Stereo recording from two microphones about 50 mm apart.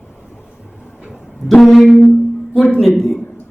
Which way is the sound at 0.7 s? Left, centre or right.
Left.